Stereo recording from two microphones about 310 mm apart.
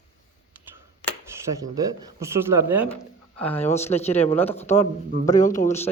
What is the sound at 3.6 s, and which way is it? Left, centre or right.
Speech, left.